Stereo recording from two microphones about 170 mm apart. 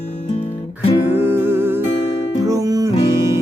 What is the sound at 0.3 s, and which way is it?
Music, 40° left (ahead or behind).